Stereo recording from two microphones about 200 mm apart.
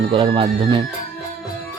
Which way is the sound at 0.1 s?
25° right (ahead or behind).